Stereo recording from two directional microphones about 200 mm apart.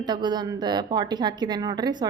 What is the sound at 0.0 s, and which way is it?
A woman's voice, 20° right (ahead or behind).